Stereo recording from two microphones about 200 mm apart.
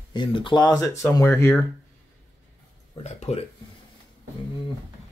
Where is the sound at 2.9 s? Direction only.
30° left (ahead or behind).